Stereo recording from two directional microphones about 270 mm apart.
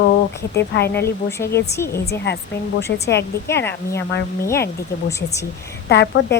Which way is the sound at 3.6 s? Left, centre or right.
Centre.